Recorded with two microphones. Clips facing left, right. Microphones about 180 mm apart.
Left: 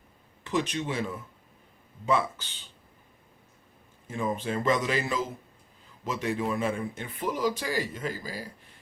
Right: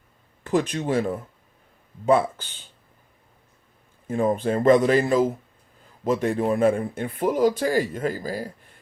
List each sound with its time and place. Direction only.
0.4 s speech: 50° right (ahead or behind)
4.0 s speech: 50° right (ahead or behind)